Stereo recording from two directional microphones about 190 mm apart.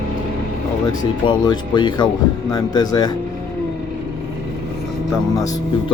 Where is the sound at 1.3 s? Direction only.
25° left (ahead or behind).